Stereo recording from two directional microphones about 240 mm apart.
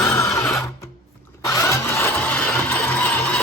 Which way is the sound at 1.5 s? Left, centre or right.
Centre.